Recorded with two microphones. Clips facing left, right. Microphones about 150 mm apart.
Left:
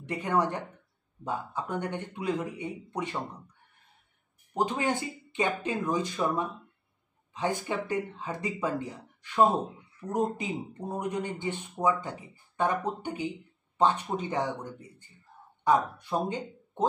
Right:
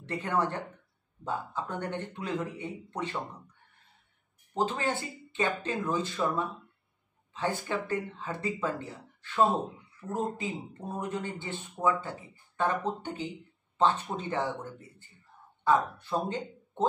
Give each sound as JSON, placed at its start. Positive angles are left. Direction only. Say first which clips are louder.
{"t": 0.0, "sound": "speech", "louder": "left 2 dB", "side_deg": 15}
{"t": 4.6, "sound": "speech", "louder": "left 2 dB", "side_deg": 15}